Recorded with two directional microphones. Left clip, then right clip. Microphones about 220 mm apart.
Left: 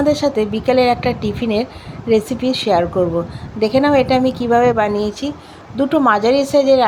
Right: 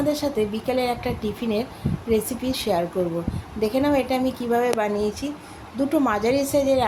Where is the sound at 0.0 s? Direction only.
20° left (ahead or behind).